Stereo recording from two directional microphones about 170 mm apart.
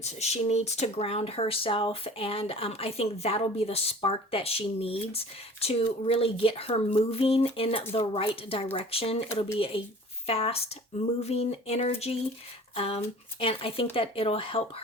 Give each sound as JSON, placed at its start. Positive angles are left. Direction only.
{"t": 0.0, "sound": "speech", "side_deg": 40}